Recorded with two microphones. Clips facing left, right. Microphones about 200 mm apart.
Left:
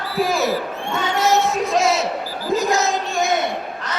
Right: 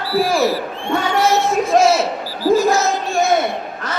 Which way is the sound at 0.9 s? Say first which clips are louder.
Right 2 dB; 20° left (ahead or behind).